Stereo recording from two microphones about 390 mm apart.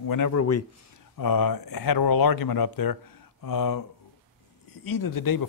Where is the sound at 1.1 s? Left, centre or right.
Left.